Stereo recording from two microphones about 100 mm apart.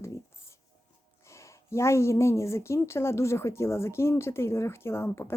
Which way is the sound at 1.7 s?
25° left (ahead or behind).